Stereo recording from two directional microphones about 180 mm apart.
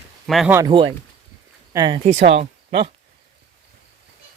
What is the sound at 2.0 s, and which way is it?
Speech, 40° right (ahead or behind).